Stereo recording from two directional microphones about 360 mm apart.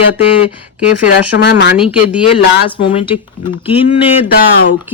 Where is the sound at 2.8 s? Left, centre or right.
Centre.